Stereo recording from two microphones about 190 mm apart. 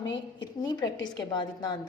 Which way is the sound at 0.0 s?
70° left (ahead or behind).